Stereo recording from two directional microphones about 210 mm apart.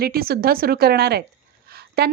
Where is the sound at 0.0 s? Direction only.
45° right (ahead or behind).